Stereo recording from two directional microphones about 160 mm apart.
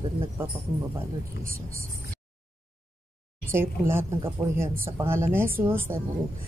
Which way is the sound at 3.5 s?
15° right (ahead or behind).